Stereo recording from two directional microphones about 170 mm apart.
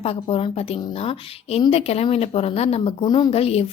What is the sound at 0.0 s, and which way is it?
Speech, 35° left (ahead or behind).